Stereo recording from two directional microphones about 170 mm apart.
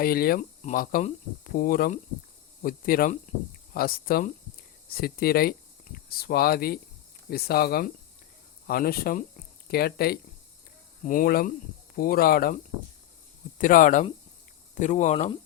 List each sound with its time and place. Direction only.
0.0 s speech: 60° left (ahead or behind)
11.0 s speech: 55° left (ahead or behind)
13.6 s speech: 50° left (ahead or behind)